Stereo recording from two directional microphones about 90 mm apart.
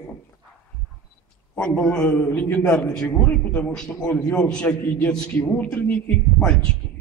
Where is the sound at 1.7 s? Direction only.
10° left (ahead or behind).